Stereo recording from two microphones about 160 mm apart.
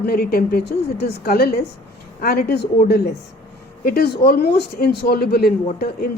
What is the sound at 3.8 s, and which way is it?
A woman's voice, 75° left (ahead or behind).